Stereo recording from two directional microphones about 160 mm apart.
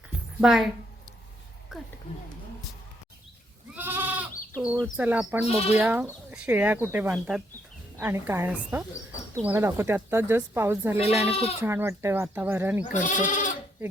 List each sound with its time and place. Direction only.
0.4 s a woman's voice: centre (ahead or behind)
1.7 s a woman's voice: centre (ahead or behind)
3.8 s goat: 10° right (ahead or behind)
4.9 s speech: 10° right (ahead or behind)
5.5 s speech: 40° left (ahead or behind)
5.7 s speech: 10° right (ahead or behind)
11.2 s speech: 40° left (ahead or behind)
11.6 s speech: 15° right (ahead or behind)
12.9 s speech: 50° left (ahead or behind)